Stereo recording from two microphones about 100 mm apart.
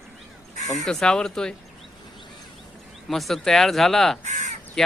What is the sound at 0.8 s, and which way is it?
Speech, 5° left (ahead or behind).